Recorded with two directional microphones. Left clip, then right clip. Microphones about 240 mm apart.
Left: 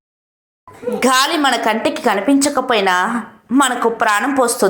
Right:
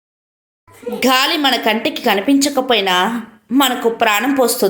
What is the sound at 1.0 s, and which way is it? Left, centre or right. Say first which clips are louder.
A woman's voice: even; centre.